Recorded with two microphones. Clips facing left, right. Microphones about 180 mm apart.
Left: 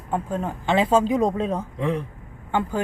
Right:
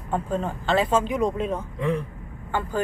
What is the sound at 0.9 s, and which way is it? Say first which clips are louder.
Speech: left 3 dB; 35° left (ahead or behind).